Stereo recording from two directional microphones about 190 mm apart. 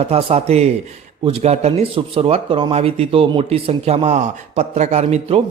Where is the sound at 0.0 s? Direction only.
30° right (ahead or behind).